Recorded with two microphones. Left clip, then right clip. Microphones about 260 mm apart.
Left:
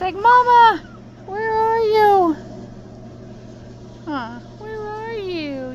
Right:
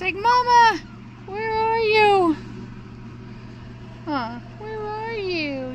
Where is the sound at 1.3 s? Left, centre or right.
Right.